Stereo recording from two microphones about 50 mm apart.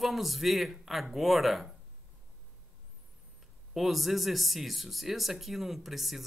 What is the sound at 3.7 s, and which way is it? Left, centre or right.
Speech, centre.